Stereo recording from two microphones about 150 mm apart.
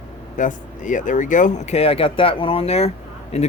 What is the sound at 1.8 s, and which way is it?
Speech, 40° left (ahead or behind).